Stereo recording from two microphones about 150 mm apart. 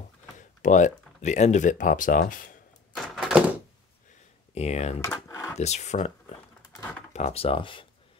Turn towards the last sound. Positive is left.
turn(degrees=35)  # may be behind; listen again after turning